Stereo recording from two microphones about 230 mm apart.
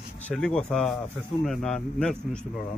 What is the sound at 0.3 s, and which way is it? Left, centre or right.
A man's voice, centre.